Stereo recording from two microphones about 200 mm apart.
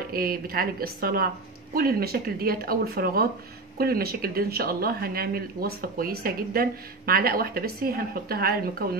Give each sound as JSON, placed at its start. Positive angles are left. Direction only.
{"t": 0.1, "sound": "speech", "side_deg": -45}